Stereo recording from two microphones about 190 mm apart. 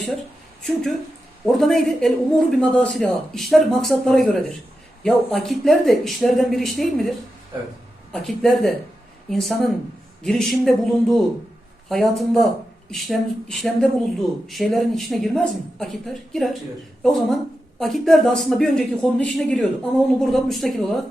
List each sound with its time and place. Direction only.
0.6 s speech: centre (ahead or behind)
8.1 s speech: centre (ahead or behind)